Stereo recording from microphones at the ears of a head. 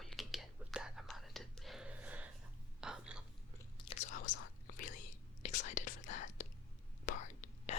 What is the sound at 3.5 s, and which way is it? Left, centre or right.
Whispering, left.